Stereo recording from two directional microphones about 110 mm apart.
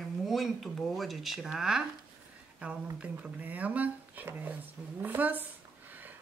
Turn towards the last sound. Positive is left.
turn(degrees=-15)  # may be behind; listen again after turning